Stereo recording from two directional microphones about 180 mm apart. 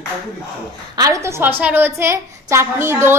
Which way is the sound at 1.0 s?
15° right (ahead or behind).